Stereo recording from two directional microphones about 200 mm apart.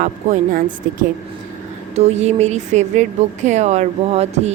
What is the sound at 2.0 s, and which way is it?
Speech, 35° right (ahead or behind).